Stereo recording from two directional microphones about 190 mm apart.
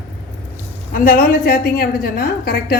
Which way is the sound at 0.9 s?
45° left (ahead or behind).